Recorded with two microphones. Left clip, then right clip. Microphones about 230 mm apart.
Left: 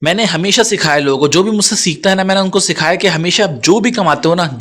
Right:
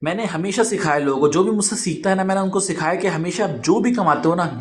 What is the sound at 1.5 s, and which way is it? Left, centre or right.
Speech, left.